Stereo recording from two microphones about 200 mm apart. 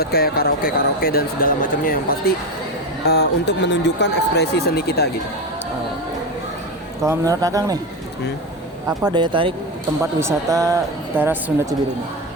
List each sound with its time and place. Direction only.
0.0 s speech: 50° left (ahead or behind)
3.1 s speech: 60° left (ahead or behind)
7.0 s speech: 15° right (ahead or behind)
9.1 s speech: 25° right (ahead or behind)
10.0 s speech: 15° right (ahead or behind)